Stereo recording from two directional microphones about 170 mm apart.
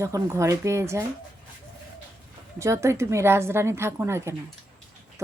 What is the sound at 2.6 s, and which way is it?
A woman's voice, 15° right (ahead or behind).